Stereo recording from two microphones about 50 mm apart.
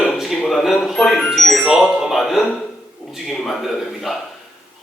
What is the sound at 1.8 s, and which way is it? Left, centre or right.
Music, right.